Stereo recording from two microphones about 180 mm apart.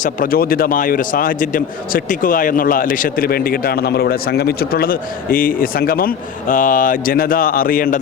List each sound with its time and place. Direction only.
0.0 s a man's voice: 50° left (ahead or behind)